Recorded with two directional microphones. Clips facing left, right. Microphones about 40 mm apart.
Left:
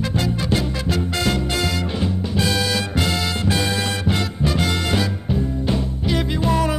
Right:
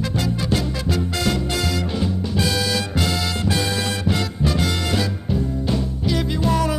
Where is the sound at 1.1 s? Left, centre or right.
Left.